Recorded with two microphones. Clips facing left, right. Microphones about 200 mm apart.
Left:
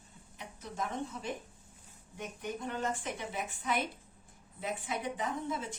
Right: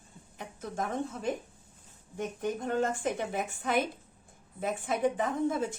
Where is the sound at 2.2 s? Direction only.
50° right (ahead or behind).